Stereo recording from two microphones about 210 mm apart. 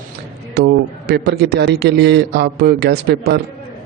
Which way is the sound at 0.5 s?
50° right (ahead or behind).